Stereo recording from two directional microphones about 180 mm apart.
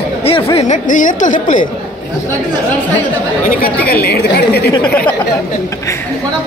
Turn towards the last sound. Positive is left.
turn(degrees=60)  # may be behind; listen again after turning